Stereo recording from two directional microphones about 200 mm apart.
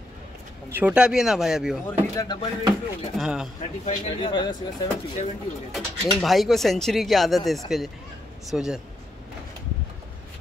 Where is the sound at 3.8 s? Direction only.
30° left (ahead or behind).